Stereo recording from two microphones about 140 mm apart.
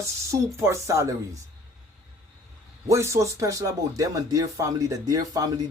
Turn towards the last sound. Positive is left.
turn(degrees=-25)  # may be behind; listen again after turning